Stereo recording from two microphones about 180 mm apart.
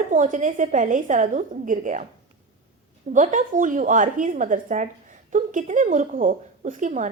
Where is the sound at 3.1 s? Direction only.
45° right (ahead or behind).